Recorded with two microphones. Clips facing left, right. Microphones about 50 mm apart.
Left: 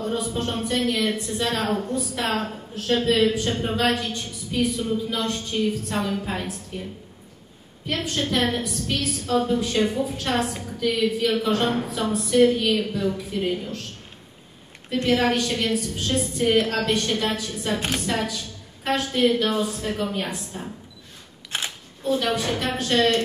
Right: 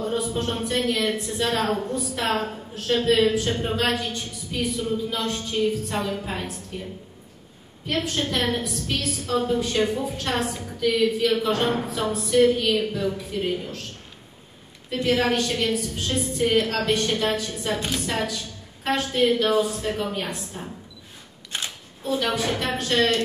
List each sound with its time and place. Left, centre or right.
0.0 s a woman's voice: centre
15.0 s a woman's voice: centre
21.5 s single-lens reflex camera: left
22.0 s a woman's voice: centre